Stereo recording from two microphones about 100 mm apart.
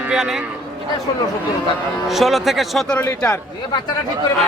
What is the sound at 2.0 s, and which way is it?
Speech, centre (ahead or behind).